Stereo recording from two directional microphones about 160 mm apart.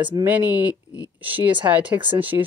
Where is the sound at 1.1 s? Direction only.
10° right (ahead or behind).